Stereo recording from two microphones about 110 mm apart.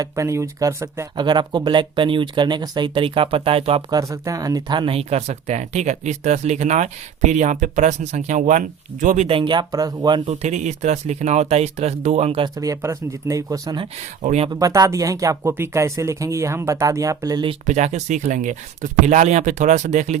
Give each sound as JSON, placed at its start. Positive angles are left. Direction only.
{"t": 0.0, "sound": "speech", "side_deg": -25}
{"t": 1.1, "sound": "speech", "side_deg": -45}
{"t": 3.8, "sound": "speech", "side_deg": -35}
{"t": 4.9, "sound": "speech", "side_deg": -70}
{"t": 9.1, "sound": "speech", "side_deg": -60}
{"t": 10.2, "sound": "speech", "side_deg": -90}
{"t": 12.5, "sound": "speech", "side_deg": -30}
{"t": 14.2, "sound": "speech", "side_deg": -75}
{"t": 14.5, "sound": "speech", "side_deg": -35}
{"t": 17.7, "sound": "speech", "side_deg": -90}